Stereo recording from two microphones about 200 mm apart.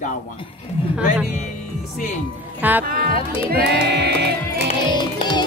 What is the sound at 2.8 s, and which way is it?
Speech, 50° right (ahead or behind).